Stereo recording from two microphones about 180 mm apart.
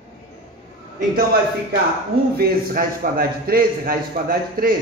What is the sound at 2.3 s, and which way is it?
Speech, 55° right (ahead or behind).